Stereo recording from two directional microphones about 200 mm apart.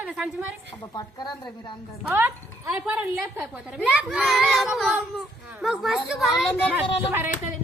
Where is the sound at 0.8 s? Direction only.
20° left (ahead or behind).